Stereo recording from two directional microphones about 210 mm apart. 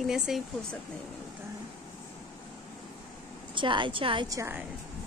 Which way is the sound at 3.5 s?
25° right (ahead or behind).